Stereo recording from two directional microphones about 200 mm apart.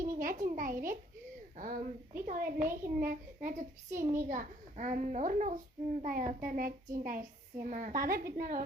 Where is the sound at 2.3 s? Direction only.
45° right (ahead or behind).